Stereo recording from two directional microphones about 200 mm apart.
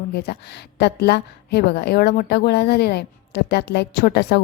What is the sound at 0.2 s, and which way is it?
A woman's voice, 55° left (ahead or behind).